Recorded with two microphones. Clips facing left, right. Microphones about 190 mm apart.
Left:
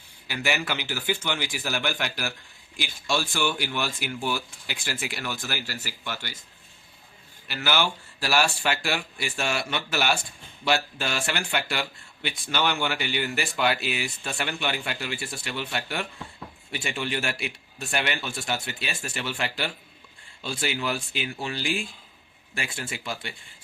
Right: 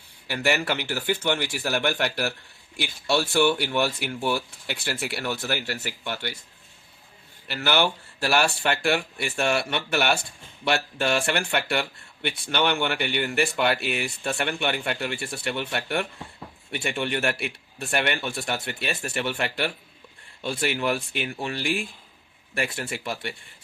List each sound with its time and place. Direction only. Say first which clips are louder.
0.3 s speech: right 4 dB; 60° right (ahead or behind)
7.4 s speech: right 3 dB; 55° right (ahead or behind)